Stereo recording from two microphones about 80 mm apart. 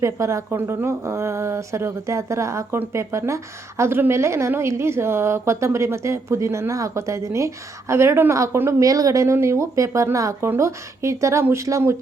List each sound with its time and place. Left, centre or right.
0.0 s a woman's voice: right
8.8 s a woman's voice: right